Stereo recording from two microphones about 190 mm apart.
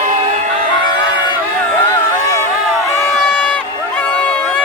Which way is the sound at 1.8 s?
20° left (ahead or behind).